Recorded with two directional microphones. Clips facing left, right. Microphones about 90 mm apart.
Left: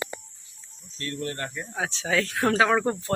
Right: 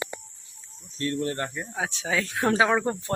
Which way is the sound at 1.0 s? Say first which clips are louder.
Right 4 dB; 25° right (ahead or behind).